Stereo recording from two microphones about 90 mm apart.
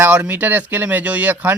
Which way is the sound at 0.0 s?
15° right (ahead or behind).